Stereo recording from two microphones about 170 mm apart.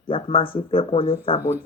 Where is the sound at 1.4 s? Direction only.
10° right (ahead or behind).